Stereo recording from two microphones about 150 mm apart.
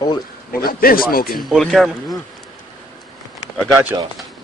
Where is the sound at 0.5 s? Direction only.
75° left (ahead or behind).